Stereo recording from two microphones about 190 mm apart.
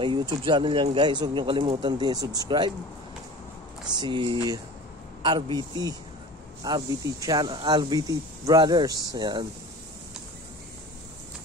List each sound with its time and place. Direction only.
0.0 s speech: 25° right (ahead or behind)
3.9 s speech: 25° right (ahead or behind)